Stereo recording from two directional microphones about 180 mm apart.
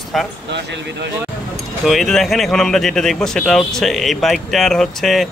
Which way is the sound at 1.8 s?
Centre (ahead or behind).